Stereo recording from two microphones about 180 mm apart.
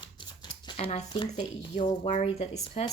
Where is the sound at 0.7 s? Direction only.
40° left (ahead or behind).